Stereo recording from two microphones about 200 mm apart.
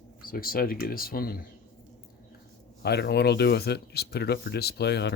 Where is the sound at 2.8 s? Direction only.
55° left (ahead or behind).